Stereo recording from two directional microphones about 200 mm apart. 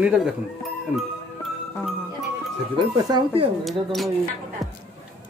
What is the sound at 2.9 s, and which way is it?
Speech, 25° right (ahead or behind).